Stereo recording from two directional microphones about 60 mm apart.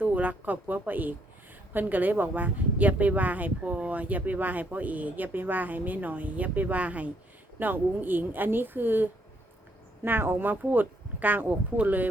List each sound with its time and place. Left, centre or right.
0.0 s speech: right